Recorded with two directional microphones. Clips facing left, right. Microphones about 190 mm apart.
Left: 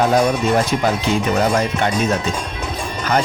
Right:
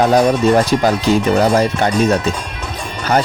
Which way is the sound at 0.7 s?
35° right (ahead or behind).